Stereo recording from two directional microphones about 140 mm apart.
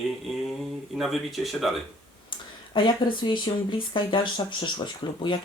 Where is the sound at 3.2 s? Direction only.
35° left (ahead or behind).